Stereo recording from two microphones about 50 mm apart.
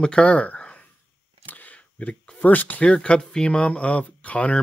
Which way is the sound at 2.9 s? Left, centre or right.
Centre.